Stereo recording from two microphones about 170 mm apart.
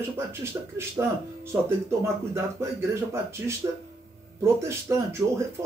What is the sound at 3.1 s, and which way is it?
Speech, 15° right (ahead or behind).